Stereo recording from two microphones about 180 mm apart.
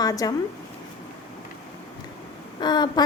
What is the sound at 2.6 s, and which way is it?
Speech, 25° left (ahead or behind).